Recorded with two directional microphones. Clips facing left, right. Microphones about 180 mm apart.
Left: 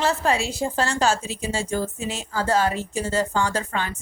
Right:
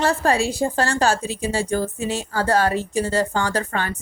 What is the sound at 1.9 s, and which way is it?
Speech, 30° right (ahead or behind).